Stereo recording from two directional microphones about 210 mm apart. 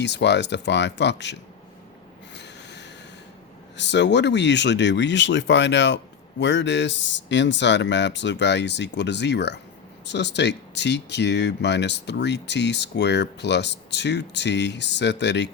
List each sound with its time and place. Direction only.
0.0 s speech: 55° left (ahead or behind)
2.3 s snort: 55° left (ahead or behind)
3.8 s speech: 55° left (ahead or behind)